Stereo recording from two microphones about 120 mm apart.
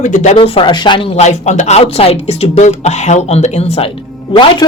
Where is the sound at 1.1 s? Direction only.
65° left (ahead or behind).